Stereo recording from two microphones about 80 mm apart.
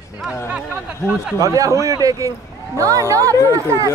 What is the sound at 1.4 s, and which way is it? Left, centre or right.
A man's voice, right.